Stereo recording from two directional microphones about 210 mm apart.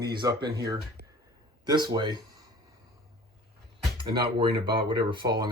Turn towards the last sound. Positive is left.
turn(degrees=-20)  # may be behind; listen again after turning